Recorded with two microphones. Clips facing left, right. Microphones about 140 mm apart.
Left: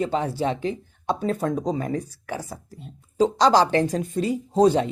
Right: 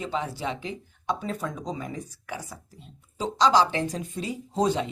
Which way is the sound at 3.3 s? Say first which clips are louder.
Left 2 dB; 55° left (ahead or behind).